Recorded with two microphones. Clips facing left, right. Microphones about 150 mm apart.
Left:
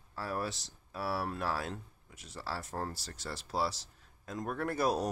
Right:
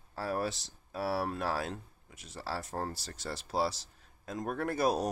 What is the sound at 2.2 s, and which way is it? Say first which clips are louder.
Speech: right 2 dB; 60° right (ahead or behind).